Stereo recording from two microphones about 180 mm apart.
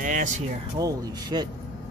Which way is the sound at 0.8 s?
20° right (ahead or behind).